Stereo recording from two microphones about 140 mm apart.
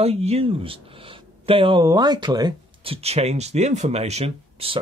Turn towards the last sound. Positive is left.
turn(degrees=-45)  # may be behind; listen again after turning